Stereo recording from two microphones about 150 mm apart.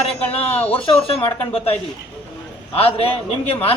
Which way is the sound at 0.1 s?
40° left (ahead or behind).